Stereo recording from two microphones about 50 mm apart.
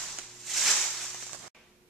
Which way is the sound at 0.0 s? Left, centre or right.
Centre.